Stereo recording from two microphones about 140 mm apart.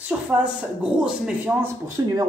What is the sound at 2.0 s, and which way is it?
Speech, 25° right (ahead or behind).